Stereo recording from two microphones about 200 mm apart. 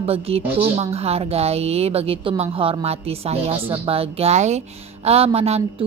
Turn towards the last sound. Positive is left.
turn(degrees=-30)  # may be behind; listen again after turning